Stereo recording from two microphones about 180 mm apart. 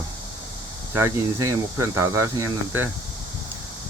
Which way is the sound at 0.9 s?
15° right (ahead or behind).